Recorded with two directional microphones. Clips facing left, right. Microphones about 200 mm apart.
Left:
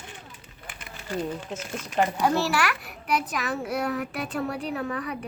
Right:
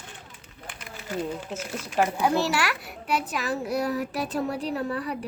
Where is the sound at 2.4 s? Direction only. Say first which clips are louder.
Even; 25° right (ahead or behind).